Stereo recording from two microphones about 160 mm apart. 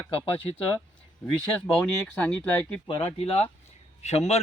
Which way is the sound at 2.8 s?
35° left (ahead or behind).